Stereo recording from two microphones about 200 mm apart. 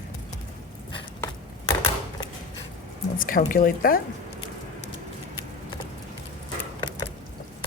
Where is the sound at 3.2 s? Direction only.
45° left (ahead or behind).